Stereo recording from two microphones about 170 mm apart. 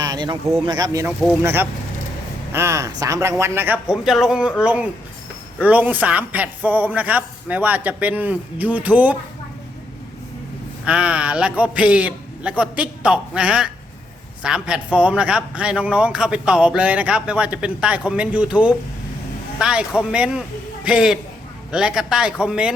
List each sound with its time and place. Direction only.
0.0 s speech: 25° right (ahead or behind)
1.0 s a man's voice: 10° right (ahead or behind)
10.8 s a man's voice: 5° right (ahead or behind)